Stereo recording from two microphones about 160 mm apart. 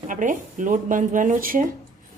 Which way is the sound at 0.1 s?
55° right (ahead or behind).